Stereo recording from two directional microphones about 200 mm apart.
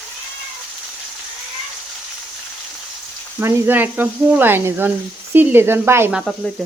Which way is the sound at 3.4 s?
10° right (ahead or behind).